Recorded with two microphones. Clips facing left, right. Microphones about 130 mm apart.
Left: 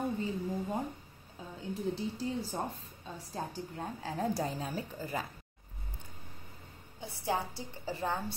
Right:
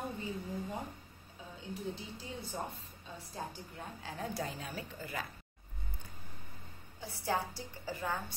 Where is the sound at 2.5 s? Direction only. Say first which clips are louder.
Right 1 dB; 45° left (ahead or behind).